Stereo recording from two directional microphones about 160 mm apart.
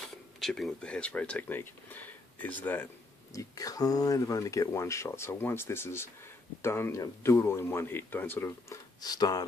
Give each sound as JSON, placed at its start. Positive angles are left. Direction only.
{"t": 0.4, "sound": "speech", "side_deg": 0}
{"t": 3.3, "sound": "speech", "side_deg": 20}